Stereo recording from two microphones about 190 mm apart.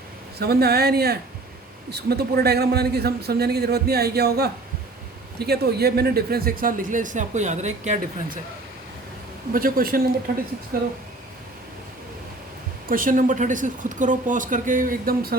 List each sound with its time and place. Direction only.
0.3 s a man's voice: 55° right (ahead or behind); by 8.4 s 40° right (ahead or behind)
9.5 s speech: 50° right (ahead or behind)
12.9 s speech: 45° right (ahead or behind)